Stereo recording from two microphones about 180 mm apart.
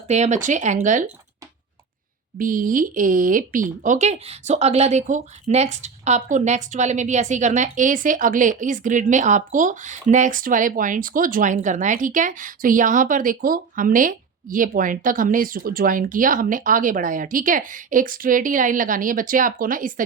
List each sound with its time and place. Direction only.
0.1 s speech: 40° right (ahead or behind)
2.4 s speech: 50° right (ahead or behind)